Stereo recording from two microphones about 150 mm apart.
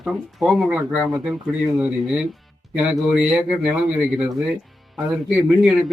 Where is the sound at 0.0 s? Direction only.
Centre (ahead or behind).